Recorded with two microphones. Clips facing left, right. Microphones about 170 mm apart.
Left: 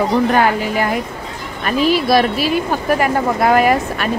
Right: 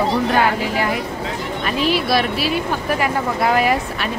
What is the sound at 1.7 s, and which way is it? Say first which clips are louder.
Speech: left 5 dB; 45° left (ahead or behind).